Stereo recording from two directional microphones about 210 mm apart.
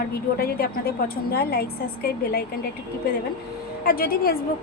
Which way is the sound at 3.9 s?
45° left (ahead or behind).